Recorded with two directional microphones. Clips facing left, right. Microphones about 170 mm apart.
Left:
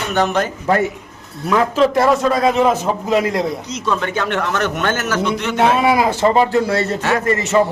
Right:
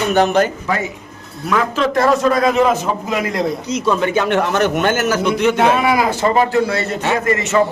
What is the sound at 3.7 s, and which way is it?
Speech, 10° right (ahead or behind).